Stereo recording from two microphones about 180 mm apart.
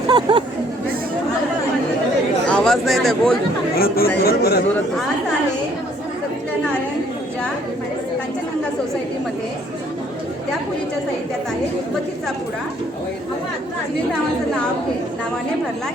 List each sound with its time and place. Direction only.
0.1 s speech: 25° right (ahead or behind)
2.5 s speech: 5° left (ahead or behind)
3.8 s speech: 55° left (ahead or behind)